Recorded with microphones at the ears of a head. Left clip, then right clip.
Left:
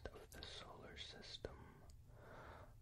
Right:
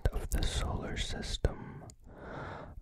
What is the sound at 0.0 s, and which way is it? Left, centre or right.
Whispering, right.